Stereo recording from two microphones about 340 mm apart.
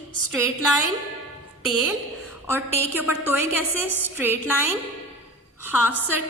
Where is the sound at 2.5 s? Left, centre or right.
Centre.